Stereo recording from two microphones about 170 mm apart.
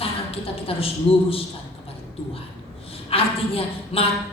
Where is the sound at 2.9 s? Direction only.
35° left (ahead or behind).